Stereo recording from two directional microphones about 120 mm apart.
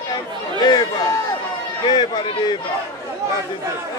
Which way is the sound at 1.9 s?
40° left (ahead or behind).